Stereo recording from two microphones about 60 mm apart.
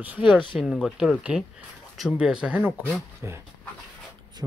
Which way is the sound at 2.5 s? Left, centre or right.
Right.